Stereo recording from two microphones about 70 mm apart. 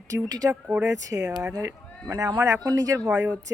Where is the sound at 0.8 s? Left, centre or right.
Right.